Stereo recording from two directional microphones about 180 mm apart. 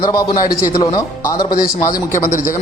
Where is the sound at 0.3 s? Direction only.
50° left (ahead or behind).